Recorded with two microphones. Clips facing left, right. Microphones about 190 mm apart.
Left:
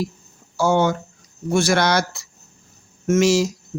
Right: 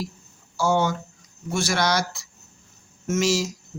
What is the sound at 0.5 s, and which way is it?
Speech, 55° left (ahead or behind).